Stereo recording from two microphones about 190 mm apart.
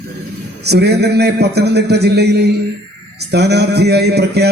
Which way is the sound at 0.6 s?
60° right (ahead or behind).